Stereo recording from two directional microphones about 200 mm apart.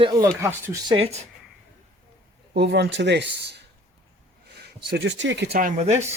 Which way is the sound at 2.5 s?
55° right (ahead or behind).